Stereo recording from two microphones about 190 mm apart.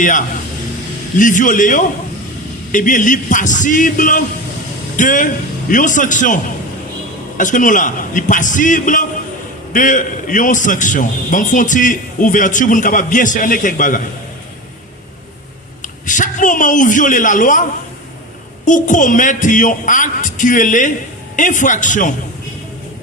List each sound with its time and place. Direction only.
0.0 s a man's voice: 45° left (ahead or behind)
16.0 s a man's voice: 40° left (ahead or behind)
18.6 s a man's voice: 40° left (ahead or behind)